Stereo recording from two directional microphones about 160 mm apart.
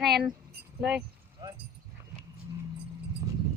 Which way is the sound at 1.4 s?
25° right (ahead or behind).